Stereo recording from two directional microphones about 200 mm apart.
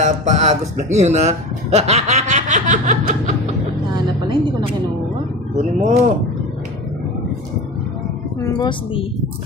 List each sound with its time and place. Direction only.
0.0 s speech: 35° right (ahead or behind)
3.9 s a sound: 20° right (ahead or behind)
5.6 s speech: 35° right (ahead or behind)
8.4 s a woman's voice: 15° left (ahead or behind)